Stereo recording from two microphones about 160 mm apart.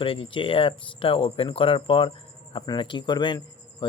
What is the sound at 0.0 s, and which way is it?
Speech, 35° left (ahead or behind).